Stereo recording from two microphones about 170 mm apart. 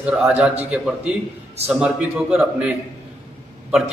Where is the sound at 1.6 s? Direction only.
5° right (ahead or behind).